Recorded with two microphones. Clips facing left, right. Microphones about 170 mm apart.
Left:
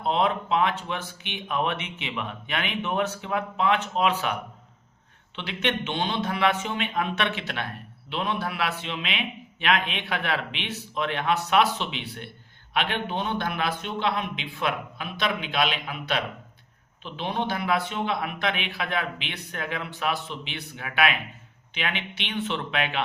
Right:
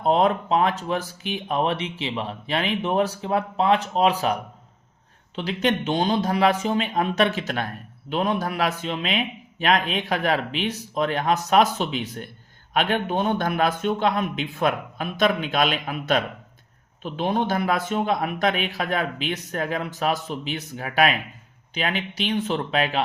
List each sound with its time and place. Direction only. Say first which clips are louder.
0.0 s speech: right 5 dB; 40° right (ahead or behind)
5.4 s a man's voice: right 5 dB; 40° right (ahead or behind)